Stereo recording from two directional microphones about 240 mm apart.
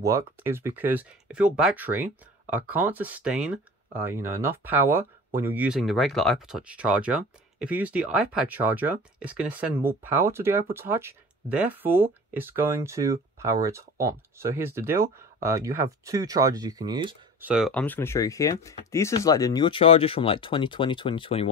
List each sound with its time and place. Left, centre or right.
0.0 s speech: centre
17.4 s speech: centre; by 21.5 s left